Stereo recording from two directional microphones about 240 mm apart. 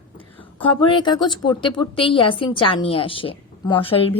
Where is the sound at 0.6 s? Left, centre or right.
Centre.